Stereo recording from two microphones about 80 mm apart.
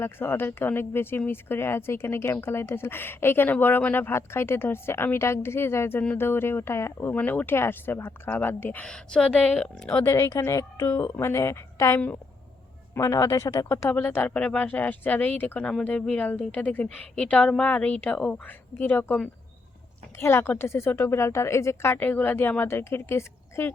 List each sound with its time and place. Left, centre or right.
0.0 s speech: left
7.1 s speech: left
8.8 s a woman's voice: centre
10.0 s speech: left
10.8 s speech: left
13.9 s a woman's voice: left
20.1 s speech: left